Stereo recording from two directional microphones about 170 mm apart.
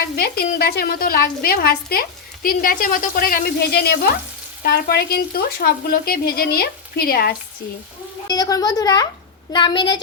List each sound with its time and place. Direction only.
0.6 s a woman's voice: 65° left (ahead or behind)
8.3 s a woman's voice: 20° left (ahead or behind)